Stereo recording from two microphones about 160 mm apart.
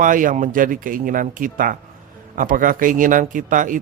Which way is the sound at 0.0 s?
55° right (ahead or behind).